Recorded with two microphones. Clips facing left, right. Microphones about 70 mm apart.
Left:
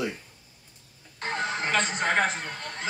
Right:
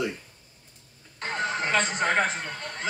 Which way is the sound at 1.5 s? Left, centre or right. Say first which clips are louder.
Right 2 dB; right.